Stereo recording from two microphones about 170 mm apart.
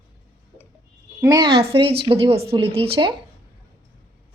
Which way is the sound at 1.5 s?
35° right (ahead or behind).